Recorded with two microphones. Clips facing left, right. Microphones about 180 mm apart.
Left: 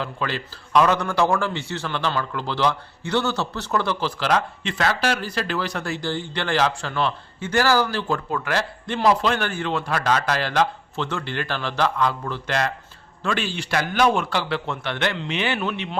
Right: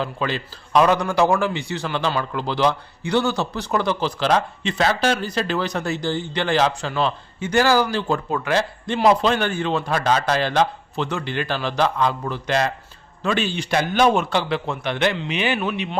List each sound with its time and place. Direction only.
0.0 s a man's voice: 20° right (ahead or behind)